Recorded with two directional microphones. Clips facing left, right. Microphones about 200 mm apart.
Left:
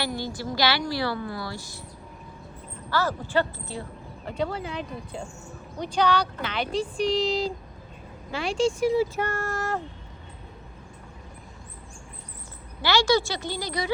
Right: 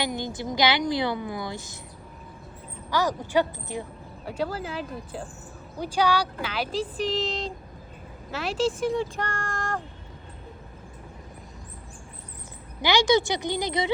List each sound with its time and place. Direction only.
0.0 s a woman's voice: 20° right (ahead or behind)
2.9 s a woman's voice: 15° right (ahead or behind)
4.3 s speech: centre (ahead or behind)
12.8 s a woman's voice: 15° right (ahead or behind)